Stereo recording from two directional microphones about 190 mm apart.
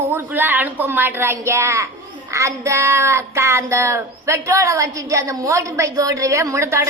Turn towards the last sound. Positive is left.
turn(degrees=-15)  # may be behind; listen again after turning